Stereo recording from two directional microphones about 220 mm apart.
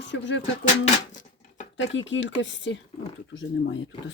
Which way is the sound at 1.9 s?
55° left (ahead or behind).